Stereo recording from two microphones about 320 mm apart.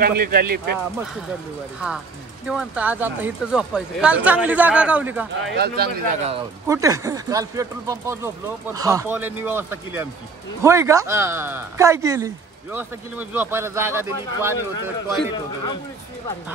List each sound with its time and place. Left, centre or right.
0.0 s speech: right
2.4 s speech: centre
5.5 s speech: right
6.0 s speech: centre
15.3 s speech: centre